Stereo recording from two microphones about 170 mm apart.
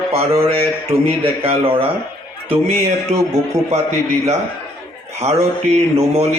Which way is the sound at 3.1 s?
40° right (ahead or behind).